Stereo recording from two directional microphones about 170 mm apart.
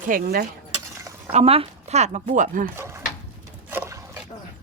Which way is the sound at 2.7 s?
15° right (ahead or behind).